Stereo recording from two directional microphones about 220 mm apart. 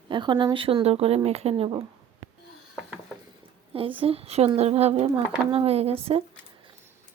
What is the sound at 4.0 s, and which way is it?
Speech, 25° right (ahead or behind).